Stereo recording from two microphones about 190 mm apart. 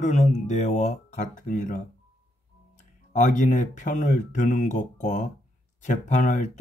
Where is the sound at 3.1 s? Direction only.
40° left (ahead or behind).